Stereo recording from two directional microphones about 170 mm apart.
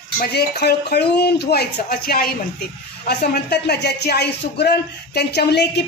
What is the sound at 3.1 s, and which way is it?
Speech, 70° left (ahead or behind).